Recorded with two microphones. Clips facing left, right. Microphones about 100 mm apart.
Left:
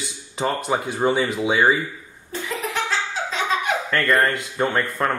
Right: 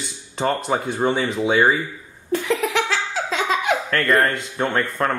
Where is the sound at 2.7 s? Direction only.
90° right.